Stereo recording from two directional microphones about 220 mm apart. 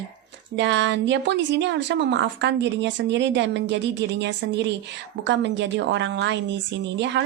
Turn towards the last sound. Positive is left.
turn(degrees=-55)  # may be behind; listen again after turning